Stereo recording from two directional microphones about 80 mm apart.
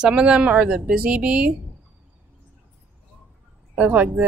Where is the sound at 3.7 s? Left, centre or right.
Centre.